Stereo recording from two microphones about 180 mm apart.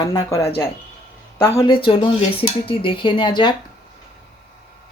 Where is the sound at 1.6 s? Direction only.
30° left (ahead or behind).